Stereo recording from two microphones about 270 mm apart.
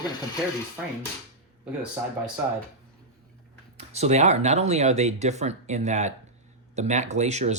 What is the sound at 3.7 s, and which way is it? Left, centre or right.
Speech, right.